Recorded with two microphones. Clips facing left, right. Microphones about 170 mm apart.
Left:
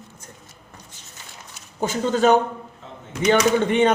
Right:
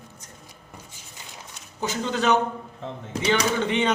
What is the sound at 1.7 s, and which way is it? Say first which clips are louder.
Speech: left 5 dB; 50° left (ahead or behind).